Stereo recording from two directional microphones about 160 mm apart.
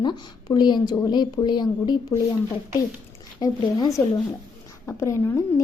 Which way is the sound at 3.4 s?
20° left (ahead or behind).